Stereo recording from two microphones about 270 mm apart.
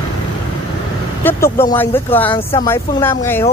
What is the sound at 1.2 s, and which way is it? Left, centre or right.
A man's voice, centre.